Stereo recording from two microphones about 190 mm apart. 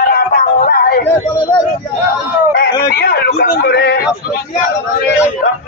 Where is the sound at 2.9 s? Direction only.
55° left (ahead or behind).